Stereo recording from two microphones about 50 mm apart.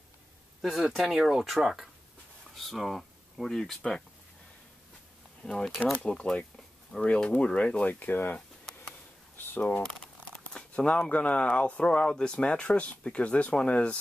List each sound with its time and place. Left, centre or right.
0.7 s speech: centre
3.5 s speech: centre
5.4 s speech: centre
7.9 s speech: left
9.6 s speech: left